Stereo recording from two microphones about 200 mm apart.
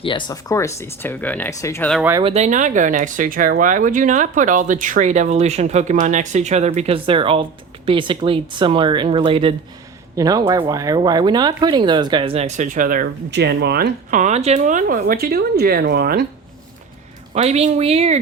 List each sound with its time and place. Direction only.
0.0 s speech: 25° left (ahead or behind)
2.0 s speech: 10° right (ahead or behind)
2.2 s speech: 35° right (ahead or behind); by 13.9 s 55° right (ahead or behind)
14.1 s speech: 35° right (ahead or behind); by 16.2 s 55° right (ahead or behind)
17.3 s speech: 35° right (ahead or behind)